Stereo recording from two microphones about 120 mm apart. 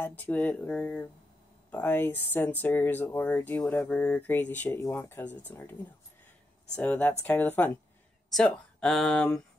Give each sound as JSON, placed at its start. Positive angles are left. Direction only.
{"t": 0.0, "sound": "speech", "side_deg": 15}
{"t": 6.8, "sound": "speech", "side_deg": 15}